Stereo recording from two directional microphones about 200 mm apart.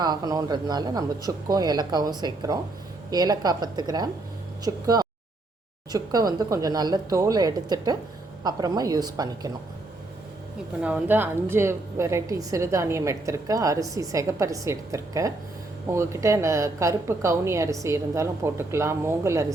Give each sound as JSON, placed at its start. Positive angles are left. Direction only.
{"t": 0.0, "sound": "speech", "side_deg": -20}
{"t": 10.8, "sound": "a woman's voice", "side_deg": -10}